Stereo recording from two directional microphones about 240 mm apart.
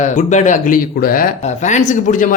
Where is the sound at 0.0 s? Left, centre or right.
Left.